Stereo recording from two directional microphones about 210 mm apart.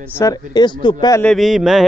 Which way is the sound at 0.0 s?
15° left (ahead or behind).